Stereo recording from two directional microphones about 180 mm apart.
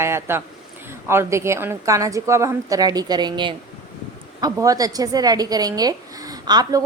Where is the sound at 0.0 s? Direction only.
15° right (ahead or behind).